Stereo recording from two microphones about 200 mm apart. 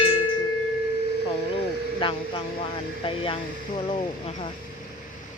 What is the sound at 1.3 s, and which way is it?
Speech, 25° left (ahead or behind).